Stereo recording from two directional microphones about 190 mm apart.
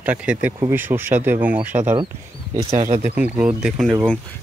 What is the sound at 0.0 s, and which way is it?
Speech, 5° right (ahead or behind).